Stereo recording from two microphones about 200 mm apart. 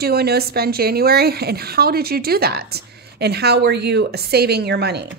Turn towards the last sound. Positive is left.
turn(degrees=-55)  # may be behind; listen again after turning